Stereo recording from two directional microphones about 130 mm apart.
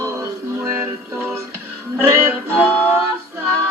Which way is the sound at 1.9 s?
20° right (ahead or behind).